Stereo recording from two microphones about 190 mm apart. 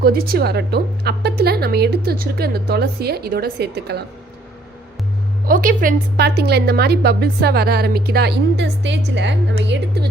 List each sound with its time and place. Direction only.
0.0 s a woman's voice: 50° right (ahead or behind)
5.5 s a woman's voice: 45° right (ahead or behind)